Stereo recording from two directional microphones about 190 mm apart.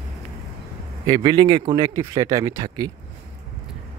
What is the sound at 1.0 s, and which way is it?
Speech, 25° right (ahead or behind).